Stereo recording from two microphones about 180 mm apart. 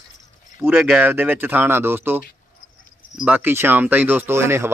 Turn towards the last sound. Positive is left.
turn(degrees=-15)  # may be behind; listen again after turning